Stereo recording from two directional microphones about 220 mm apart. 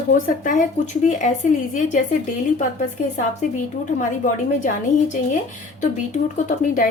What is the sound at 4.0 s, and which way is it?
Speech, 35° left (ahead or behind).